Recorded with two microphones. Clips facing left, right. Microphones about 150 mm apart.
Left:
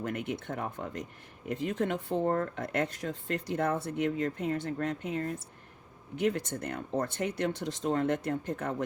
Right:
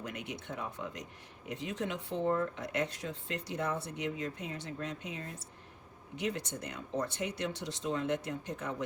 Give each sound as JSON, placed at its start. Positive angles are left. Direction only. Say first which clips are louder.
{"t": 0.0, "sound": "speech", "louder": "left 7 dB", "side_deg": 55}